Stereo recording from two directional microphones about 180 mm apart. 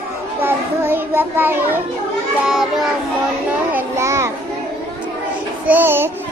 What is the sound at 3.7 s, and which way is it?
Child singing, 15° right (ahead or behind).